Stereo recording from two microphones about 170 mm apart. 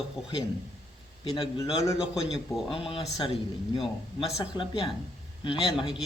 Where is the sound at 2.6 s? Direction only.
30° left (ahead or behind).